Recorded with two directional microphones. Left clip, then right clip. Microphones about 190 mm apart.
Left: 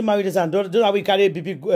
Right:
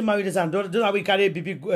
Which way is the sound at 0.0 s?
25° left (ahead or behind).